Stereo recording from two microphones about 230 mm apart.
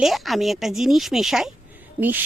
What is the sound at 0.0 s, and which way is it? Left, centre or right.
A woman's voice, centre.